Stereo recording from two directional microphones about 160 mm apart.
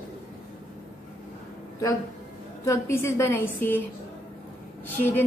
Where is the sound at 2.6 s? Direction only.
20° left (ahead or behind).